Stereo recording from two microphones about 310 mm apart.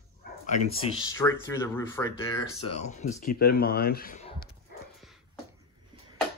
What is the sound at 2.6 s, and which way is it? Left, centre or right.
Speech, left.